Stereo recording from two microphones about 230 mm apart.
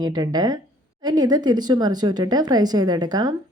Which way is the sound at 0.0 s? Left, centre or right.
Centre.